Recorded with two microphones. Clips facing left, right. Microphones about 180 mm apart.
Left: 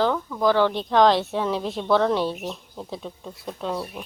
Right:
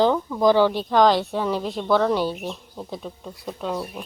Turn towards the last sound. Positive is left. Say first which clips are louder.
# right 1 dB
turn(degrees=0)  # may be behind; listen again after turning